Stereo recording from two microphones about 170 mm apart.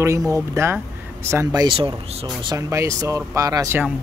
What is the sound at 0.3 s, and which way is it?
Speech, 15° right (ahead or behind).